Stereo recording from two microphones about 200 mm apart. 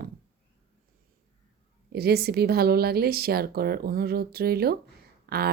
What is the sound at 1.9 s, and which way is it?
Speech, 50° right (ahead or behind).